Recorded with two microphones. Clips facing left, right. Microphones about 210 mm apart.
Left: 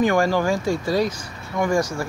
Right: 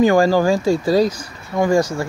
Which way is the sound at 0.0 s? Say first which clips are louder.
Right 5 dB; 35° right (ahead or behind).